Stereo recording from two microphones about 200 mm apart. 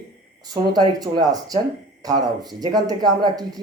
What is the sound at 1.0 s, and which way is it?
Speech, 20° right (ahead or behind).